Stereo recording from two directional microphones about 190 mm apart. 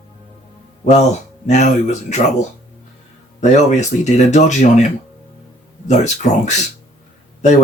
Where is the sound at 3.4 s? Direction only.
35° left (ahead or behind).